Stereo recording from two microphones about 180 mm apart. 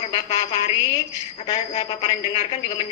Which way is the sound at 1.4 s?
30° left (ahead or behind).